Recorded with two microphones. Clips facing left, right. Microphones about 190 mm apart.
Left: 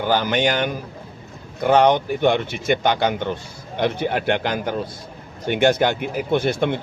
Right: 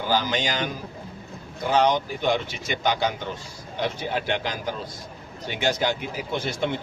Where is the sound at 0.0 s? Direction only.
60° left (ahead or behind).